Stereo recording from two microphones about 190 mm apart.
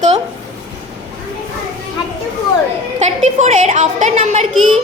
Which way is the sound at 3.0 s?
40° right (ahead or behind).